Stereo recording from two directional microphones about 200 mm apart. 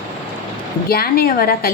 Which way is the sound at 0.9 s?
50° left (ahead or behind).